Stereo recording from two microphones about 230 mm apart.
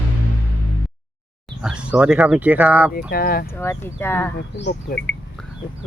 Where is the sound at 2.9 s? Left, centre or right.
Left.